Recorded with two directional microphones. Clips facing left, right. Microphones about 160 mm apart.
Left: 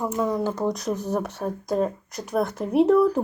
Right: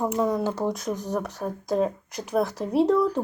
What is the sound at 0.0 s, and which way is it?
Speech, 20° right (ahead or behind).